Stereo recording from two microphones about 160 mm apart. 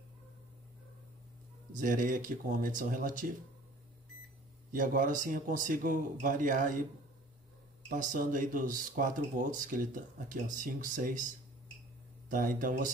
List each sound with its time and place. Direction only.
1.7 s speech: 55° right (ahead or behind)
4.7 s speech: 55° right (ahead or behind)
8.0 s speech: 55° right (ahead or behind)
12.3 s speech: 55° right (ahead or behind)